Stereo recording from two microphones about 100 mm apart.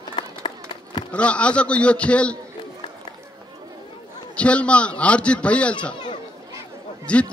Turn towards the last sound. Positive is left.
turn(degrees=10)  # may be behind; listen again after turning